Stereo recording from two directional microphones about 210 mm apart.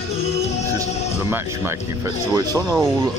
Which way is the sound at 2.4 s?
15° right (ahead or behind).